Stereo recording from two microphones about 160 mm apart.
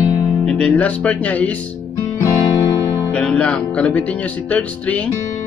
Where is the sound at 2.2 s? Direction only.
20° left (ahead or behind).